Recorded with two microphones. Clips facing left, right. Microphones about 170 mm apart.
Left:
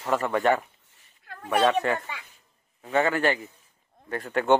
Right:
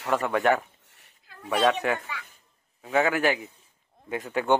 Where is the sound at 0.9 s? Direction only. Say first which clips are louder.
Right 3 dB; 75° right (ahead or behind).